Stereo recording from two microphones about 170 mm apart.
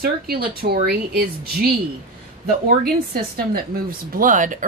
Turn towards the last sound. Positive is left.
turn(degrees=-50)  # may be behind; listen again after turning